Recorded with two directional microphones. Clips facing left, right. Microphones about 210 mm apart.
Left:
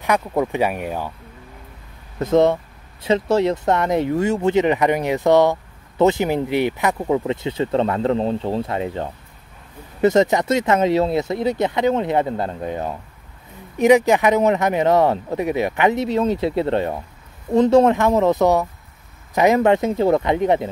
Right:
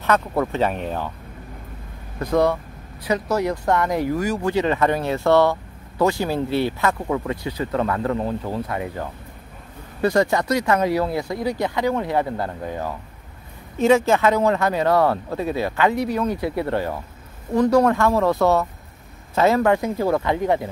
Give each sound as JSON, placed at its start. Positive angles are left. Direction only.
{"t": 0.0, "sound": "speech", "side_deg": 15}
{"t": 2.1, "sound": "speech", "side_deg": 25}